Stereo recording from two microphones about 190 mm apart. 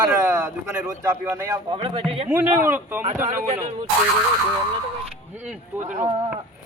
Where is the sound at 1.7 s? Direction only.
30° right (ahead or behind).